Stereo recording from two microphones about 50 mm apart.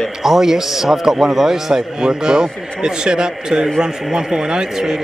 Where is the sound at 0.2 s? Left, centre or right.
Centre.